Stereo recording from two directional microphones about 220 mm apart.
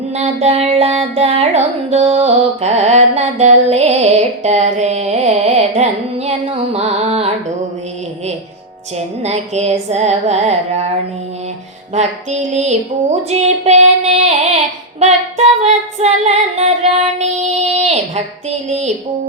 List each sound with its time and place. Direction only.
0.2 s music: 30° right (ahead or behind)
9.2 s music: 30° right (ahead or behind)
11.9 s child singing: 30° right (ahead or behind)
17.7 s a sound: 30° right (ahead or behind)
18.7 s child singing: 30° right (ahead or behind)